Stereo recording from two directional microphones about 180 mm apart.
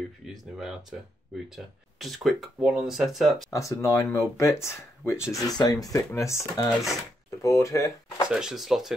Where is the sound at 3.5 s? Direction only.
15° left (ahead or behind).